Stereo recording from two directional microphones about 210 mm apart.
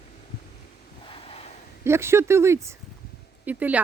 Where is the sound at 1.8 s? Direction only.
10° right (ahead or behind).